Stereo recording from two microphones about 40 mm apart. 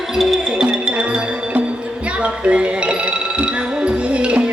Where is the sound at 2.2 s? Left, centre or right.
Right.